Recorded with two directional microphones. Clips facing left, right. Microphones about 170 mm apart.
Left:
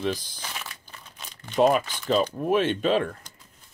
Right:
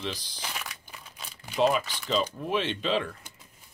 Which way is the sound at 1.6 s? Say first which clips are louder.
Left 4 dB; 50° left (ahead or behind).